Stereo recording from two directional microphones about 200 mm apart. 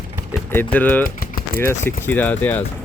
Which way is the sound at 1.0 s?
45° left (ahead or behind).